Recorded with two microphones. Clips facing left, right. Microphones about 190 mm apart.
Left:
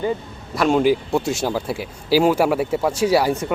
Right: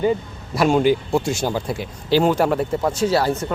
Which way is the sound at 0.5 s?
Centre (ahead or behind).